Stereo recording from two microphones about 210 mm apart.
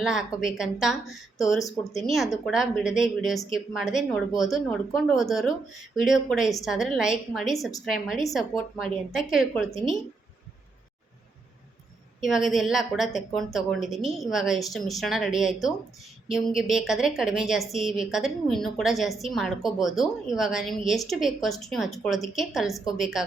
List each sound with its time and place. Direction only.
0.0 s a woman's voice: centre (ahead or behind)
12.2 s a woman's voice: centre (ahead or behind)